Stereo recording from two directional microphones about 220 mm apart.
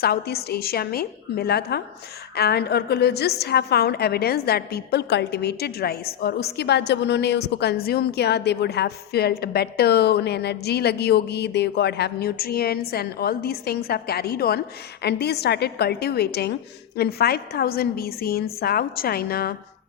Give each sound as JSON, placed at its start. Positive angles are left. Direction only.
{"t": 0.0, "sound": "a woman's voice", "side_deg": 45}